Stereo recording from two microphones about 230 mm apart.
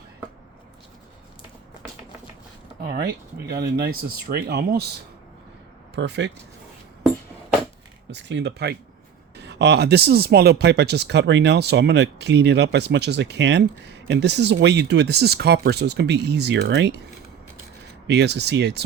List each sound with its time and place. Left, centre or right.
2.8 s speech: right
5.9 s speech: right
8.1 s speech: right
18.1 s speech: right